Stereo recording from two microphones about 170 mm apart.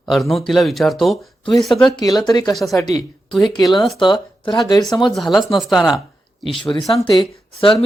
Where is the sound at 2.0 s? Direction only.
25° left (ahead or behind).